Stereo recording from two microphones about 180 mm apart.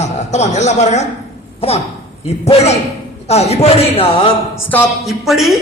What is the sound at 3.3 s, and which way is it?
Speech, 35° left (ahead or behind).